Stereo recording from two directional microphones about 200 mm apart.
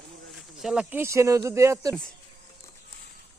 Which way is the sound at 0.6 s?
5° right (ahead or behind).